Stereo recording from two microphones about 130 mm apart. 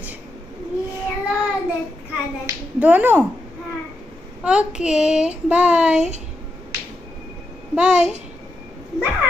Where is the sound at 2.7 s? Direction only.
10° right (ahead or behind).